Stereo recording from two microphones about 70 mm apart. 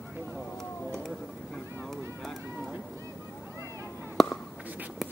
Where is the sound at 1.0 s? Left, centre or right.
Centre.